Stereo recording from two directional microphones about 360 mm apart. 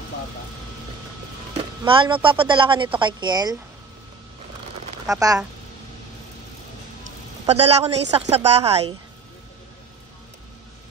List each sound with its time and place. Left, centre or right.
1.6 s speech: centre
5.0 s speech: centre
7.1 s a man's voice: centre